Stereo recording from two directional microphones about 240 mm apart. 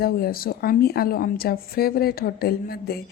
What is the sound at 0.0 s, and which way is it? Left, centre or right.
Speech, left.